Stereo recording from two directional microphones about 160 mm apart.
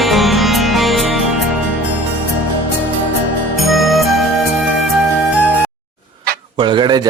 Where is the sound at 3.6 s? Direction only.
Centre (ahead or behind).